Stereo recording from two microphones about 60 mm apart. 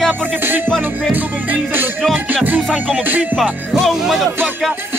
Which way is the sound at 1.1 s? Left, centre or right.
Right.